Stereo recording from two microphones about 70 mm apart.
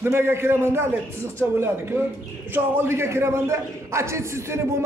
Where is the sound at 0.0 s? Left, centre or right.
Right.